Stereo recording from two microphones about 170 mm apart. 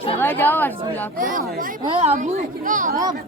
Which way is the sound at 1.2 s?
55° right (ahead or behind).